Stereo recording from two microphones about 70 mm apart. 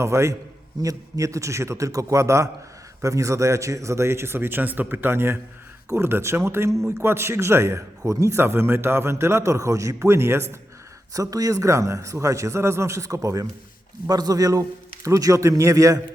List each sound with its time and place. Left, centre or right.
0.0 s a man's voice: right
0.8 s a man's voice: right
11.1 s a man's voice: right
14.1 s a man's voice: right